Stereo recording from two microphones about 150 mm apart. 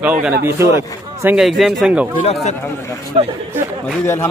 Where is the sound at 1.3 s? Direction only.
Centre (ahead or behind).